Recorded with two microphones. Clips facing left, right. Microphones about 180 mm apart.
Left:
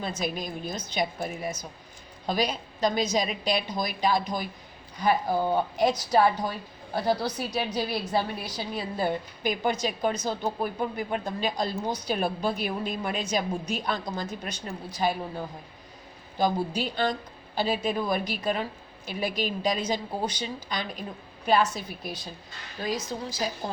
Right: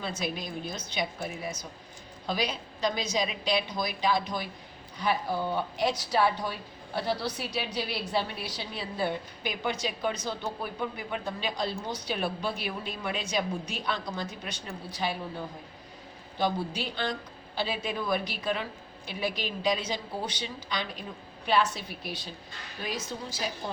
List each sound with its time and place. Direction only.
0.2 s a woman's voice: 45° left (ahead or behind)
2.2 s a woman's voice: 45° left (ahead or behind)
16.4 s a woman's voice: 45° left (ahead or behind)